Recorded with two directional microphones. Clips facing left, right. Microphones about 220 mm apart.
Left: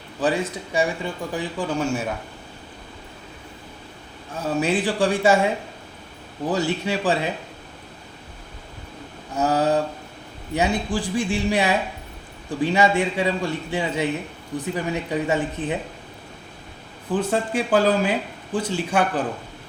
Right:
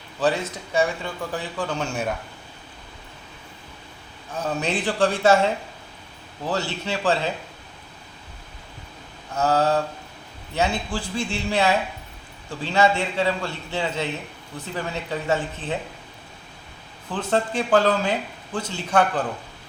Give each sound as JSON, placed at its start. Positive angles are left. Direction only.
{"t": 0.2, "sound": "a man's voice", "side_deg": 15}
{"t": 4.4, "sound": "a man's voice", "side_deg": 10}
{"t": 6.5, "sound": "a man's voice", "side_deg": 15}
{"t": 9.3, "sound": "a man's voice", "side_deg": 15}
{"t": 15.6, "sound": "speech", "side_deg": 55}
{"t": 17.1, "sound": "a man's voice", "side_deg": 10}